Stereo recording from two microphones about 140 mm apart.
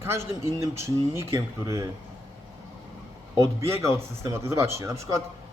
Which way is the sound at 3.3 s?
20° right (ahead or behind).